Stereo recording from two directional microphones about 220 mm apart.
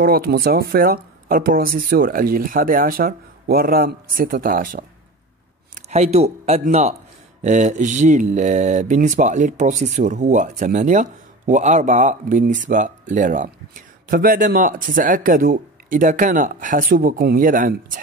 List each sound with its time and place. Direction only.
0.0 s speech: 45° right (ahead or behind)
5.9 s speech: 30° right (ahead or behind)